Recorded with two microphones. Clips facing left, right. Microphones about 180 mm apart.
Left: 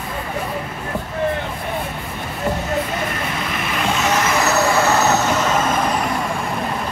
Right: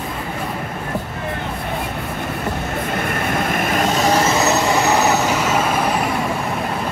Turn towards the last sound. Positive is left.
turn(degrees=-10)  # may be behind; listen again after turning